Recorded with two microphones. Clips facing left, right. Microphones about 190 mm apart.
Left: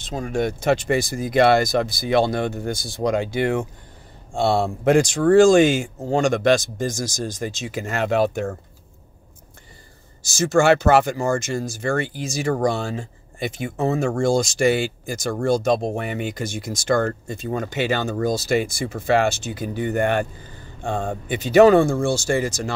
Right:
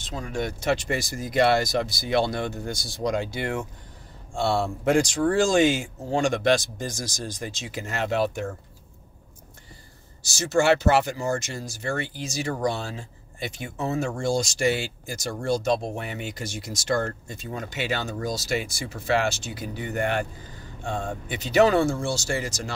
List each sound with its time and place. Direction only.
0.1 s speech: 50° left (ahead or behind)
10.2 s speech: 50° left (ahead or behind)